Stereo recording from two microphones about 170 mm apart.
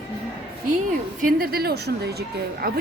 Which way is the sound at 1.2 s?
60° right (ahead or behind).